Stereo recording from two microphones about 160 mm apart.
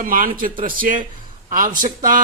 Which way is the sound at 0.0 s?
60° right (ahead or behind).